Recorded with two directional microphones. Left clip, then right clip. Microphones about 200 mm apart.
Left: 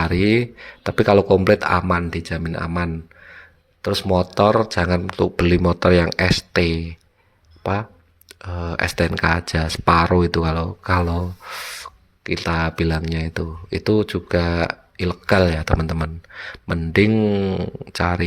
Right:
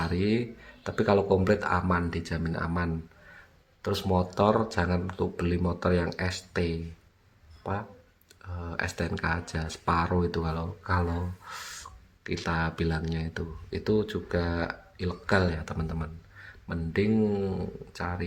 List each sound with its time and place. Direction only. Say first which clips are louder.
0.0 s speech: left 11 dB; 40° left (ahead or behind)